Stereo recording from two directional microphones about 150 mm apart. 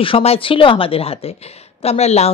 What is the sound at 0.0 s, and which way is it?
Speech, 40° left (ahead or behind).